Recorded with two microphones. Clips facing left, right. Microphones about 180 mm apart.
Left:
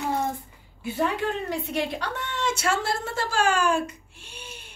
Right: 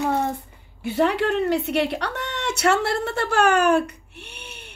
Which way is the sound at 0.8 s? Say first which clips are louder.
Right 5 dB; 70° right (ahead or behind).